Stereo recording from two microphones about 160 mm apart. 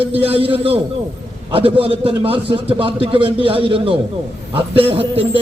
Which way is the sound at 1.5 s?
35° right (ahead or behind).